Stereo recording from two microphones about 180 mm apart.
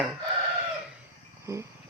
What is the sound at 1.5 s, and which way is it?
Speech, 15° right (ahead or behind).